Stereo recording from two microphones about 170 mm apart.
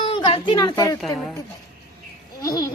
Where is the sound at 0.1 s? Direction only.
30° left (ahead or behind).